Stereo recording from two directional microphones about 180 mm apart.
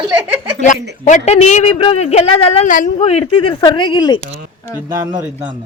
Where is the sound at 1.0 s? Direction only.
40° left (ahead or behind).